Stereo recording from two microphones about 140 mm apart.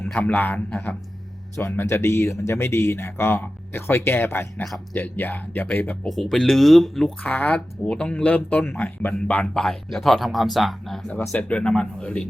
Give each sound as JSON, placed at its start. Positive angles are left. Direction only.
{"t": 0.0, "sound": "speech", "side_deg": 10}
{"t": 6.1, "sound": "speech", "side_deg": 0}